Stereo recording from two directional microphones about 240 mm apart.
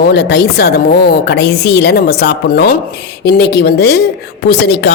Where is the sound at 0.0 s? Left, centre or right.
Left.